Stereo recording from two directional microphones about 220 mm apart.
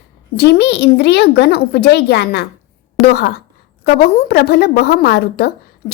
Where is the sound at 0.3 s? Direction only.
50° left (ahead or behind).